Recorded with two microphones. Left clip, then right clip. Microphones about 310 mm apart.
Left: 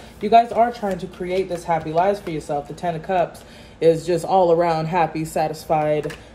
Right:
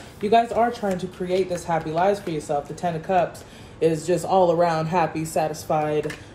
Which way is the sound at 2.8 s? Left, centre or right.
Left.